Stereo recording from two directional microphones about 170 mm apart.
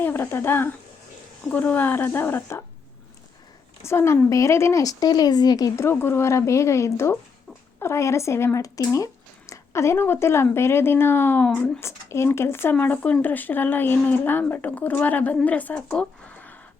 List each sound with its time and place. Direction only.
0.0 s a woman's voice: 15° left (ahead or behind)
3.8 s speech: 15° left (ahead or behind)